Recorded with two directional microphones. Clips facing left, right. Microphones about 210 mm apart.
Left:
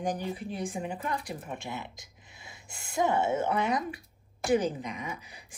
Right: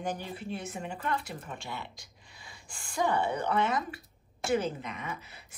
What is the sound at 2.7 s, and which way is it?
Speech, 20° left (ahead or behind).